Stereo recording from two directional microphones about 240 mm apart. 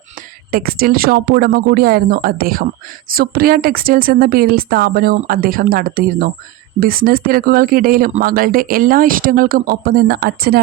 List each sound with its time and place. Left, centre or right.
0.5 s speech: right